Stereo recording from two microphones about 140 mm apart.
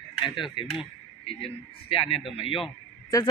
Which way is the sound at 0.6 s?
40° left (ahead or behind).